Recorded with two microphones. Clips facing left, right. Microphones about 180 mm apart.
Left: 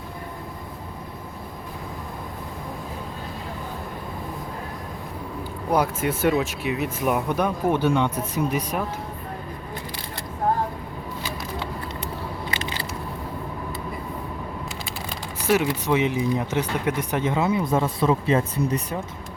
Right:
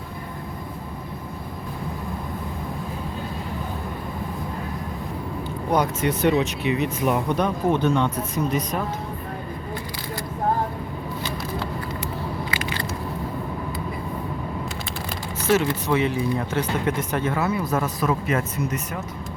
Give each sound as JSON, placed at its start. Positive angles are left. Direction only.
{"t": 5.7, "sound": "speech", "side_deg": 5}
{"t": 15.4, "sound": "speech", "side_deg": 15}